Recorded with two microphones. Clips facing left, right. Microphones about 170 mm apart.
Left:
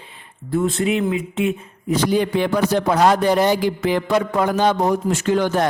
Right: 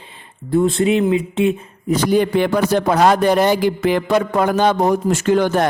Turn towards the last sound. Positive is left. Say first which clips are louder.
# right 3 dB
turn(degrees=-55)  # may be behind; listen again after turning